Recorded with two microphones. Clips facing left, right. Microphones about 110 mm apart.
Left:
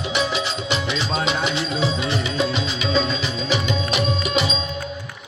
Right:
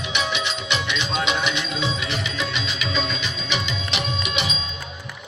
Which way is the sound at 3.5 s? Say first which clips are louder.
Left 5 dB; 40° left (ahead or behind).